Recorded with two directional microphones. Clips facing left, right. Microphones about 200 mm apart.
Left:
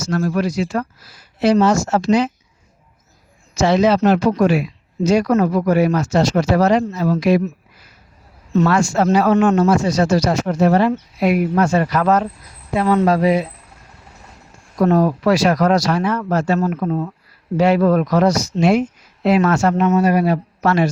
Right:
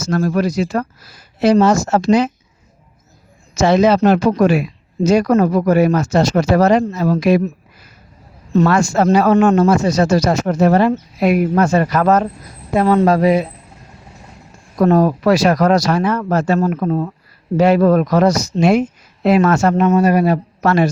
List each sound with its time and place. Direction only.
0.1 s speech: 45° right (ahead or behind)
3.6 s speech: 50° right (ahead or behind)
8.6 s speech: 45° right (ahead or behind)
14.8 s speech: 50° right (ahead or behind)